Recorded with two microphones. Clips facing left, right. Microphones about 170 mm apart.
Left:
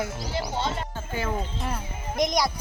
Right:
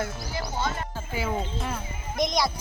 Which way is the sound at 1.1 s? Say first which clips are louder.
Right 1 dB; 10° right (ahead or behind).